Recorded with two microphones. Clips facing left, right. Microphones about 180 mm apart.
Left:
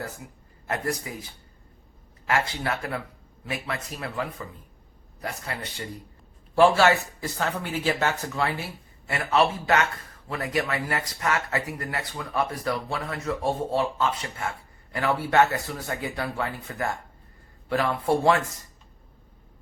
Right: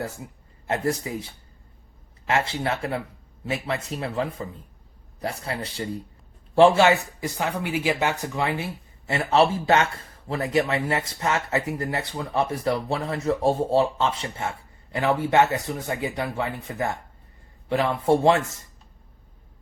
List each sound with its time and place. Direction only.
0.7 s speech: 30° right (ahead or behind)
6.6 s speech: 20° right (ahead or behind)